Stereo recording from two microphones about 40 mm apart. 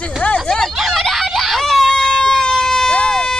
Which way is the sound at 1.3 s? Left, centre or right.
Centre.